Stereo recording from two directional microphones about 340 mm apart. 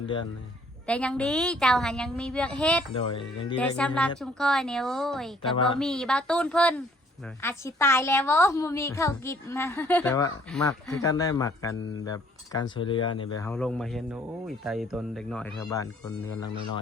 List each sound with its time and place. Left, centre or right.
0.0 s speech: centre
0.9 s speech: centre
2.9 s a woman's voice: centre
3.6 s speech: centre
5.5 s a woman's voice: centre
5.8 s a woman's voice: centre